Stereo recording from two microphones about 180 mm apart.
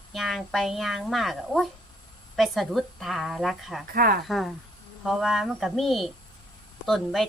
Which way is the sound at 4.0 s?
55° right (ahead or behind).